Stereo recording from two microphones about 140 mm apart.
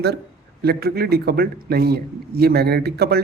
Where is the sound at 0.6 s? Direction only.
90° right.